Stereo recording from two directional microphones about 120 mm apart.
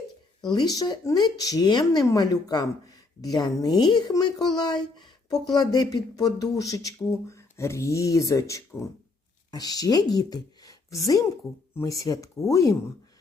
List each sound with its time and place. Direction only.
0.4 s speech: 35° left (ahead or behind)